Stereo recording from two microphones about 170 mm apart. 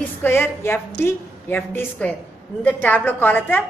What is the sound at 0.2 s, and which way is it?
A woman's voice, 15° left (ahead or behind).